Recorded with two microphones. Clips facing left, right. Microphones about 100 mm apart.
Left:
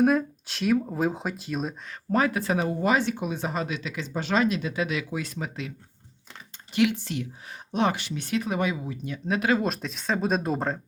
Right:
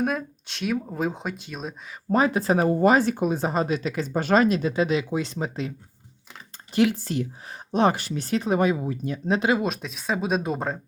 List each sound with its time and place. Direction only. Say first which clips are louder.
0.0 s speech: left 5 dB; centre (ahead or behind)
2.1 s speech: right 3 dB; 20° right (ahead or behind)
2.4 s speech: right 6 dB; 40° right (ahead or behind)
6.7 s speech: right 2 dB; 35° right (ahead or behind)
9.6 s speech: right 1 dB; centre (ahead or behind)